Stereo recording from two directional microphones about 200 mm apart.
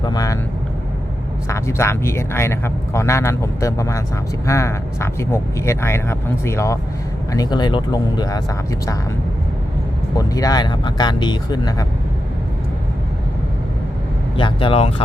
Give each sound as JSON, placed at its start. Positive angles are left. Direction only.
{"t": 0.0, "sound": "speech", "side_deg": 20}
{"t": 1.5, "sound": "speech", "side_deg": 15}
{"t": 10.2, "sound": "speech", "side_deg": 20}
{"t": 14.3, "sound": "speech", "side_deg": 25}